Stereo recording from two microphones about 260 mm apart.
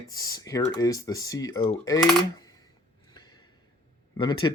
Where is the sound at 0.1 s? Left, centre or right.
Centre.